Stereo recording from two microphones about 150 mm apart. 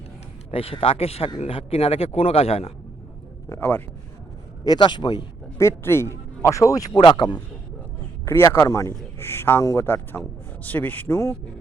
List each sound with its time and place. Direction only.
0.5 s speech: 40° left (ahead or behind)
3.5 s a man's voice: 15° left (ahead or behind)
4.6 s speech: 30° left (ahead or behind)
5.5 s speech: 15° left (ahead or behind)
8.2 s a man's voice: 15° left (ahead or behind)